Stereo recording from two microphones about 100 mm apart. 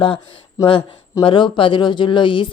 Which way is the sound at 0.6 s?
35° left (ahead or behind).